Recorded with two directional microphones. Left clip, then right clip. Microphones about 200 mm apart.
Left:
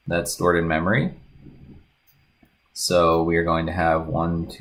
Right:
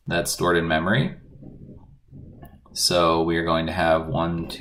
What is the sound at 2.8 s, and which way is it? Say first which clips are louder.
Speech: left 1 dB; 40° left (ahead or behind).